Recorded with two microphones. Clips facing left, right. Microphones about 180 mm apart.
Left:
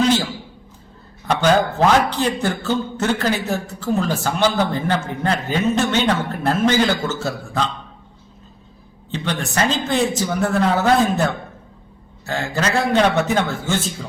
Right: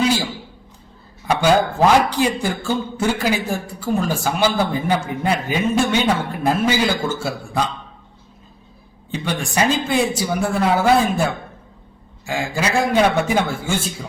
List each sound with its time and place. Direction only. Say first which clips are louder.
0.0 s a sound: left 2 dB; 10° right (ahead or behind)
1.3 s a man's voice: even; 10° right (ahead or behind)
9.1 s a man's voice: right 1 dB; 10° right (ahead or behind)